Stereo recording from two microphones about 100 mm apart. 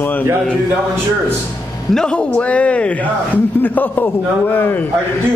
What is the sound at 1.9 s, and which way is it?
A man's voice, 10° left (ahead or behind).